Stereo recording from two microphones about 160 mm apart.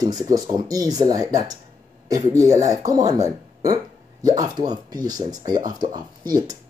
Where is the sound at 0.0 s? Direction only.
25° right (ahead or behind).